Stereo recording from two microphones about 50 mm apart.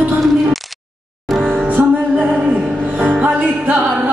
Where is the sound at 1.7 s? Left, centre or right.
Right.